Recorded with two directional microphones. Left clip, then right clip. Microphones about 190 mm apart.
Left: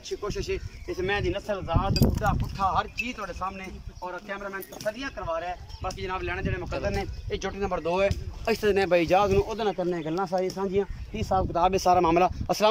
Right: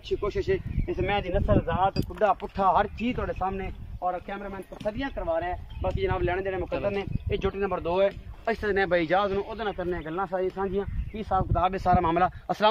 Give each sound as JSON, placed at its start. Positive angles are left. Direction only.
{"t": 0.2, "sound": "speech", "side_deg": -30}
{"t": 4.8, "sound": "speech", "side_deg": -25}
{"t": 7.2, "sound": "speech", "side_deg": -5}